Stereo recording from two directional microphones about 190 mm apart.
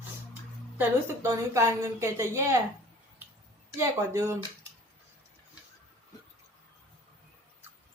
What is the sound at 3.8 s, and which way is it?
Speech, 15° right (ahead or behind).